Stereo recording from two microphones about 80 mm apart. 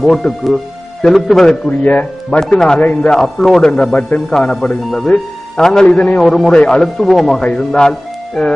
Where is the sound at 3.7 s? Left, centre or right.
Centre.